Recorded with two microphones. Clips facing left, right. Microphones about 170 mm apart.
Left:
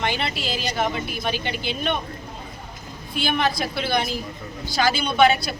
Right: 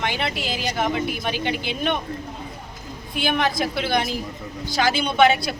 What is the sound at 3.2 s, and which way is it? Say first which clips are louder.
Speech: right 1 dB; 15° right (ahead or behind).